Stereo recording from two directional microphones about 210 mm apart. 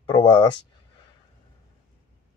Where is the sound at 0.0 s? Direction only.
20° left (ahead or behind).